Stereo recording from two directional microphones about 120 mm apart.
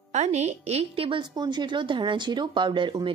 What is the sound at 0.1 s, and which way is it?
A woman's voice, 70° right (ahead or behind).